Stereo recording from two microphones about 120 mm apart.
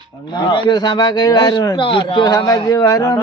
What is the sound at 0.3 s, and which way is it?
A man's voice, 35° left (ahead or behind).